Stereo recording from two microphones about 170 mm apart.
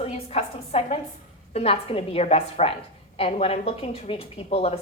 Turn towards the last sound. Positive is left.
turn(degrees=35)  # may be behind; listen again after turning